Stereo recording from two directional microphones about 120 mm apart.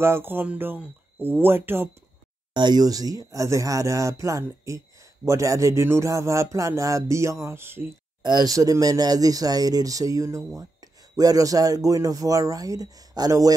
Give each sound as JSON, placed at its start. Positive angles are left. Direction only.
{"t": 0.0, "sound": "speech", "side_deg": -20}
{"t": 2.5, "sound": "speech", "side_deg": -35}
{"t": 8.2, "sound": "speech", "side_deg": -35}